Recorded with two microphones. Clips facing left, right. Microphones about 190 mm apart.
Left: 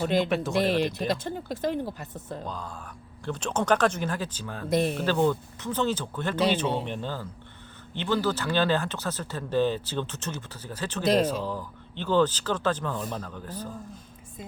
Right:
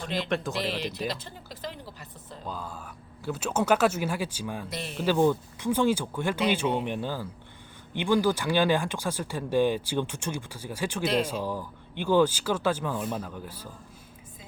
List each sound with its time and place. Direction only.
0.3 s speech: centre (ahead or behind)
0.6 s speech: 50° left (ahead or behind)
2.5 s speech: 5° right (ahead or behind)
4.7 s speech: 50° left (ahead or behind)
5.0 s speech: 15° right (ahead or behind)